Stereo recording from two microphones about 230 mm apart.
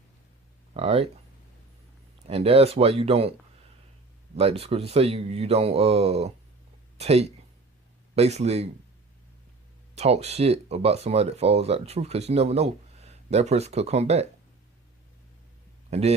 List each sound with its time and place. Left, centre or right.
0.7 s speech: right
2.2 s speech: right
4.4 s speech: right
9.9 s speech: right
15.9 s a man's voice: right